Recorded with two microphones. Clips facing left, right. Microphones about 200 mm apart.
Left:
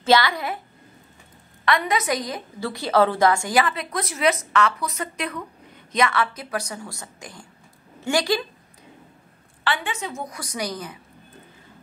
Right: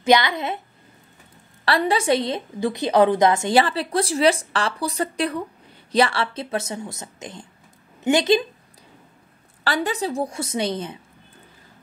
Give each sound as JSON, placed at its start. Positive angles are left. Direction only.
{"t": 0.0, "sound": "speech", "side_deg": -20}
{"t": 1.6, "sound": "a woman's voice", "side_deg": -30}
{"t": 9.7, "sound": "speech", "side_deg": -35}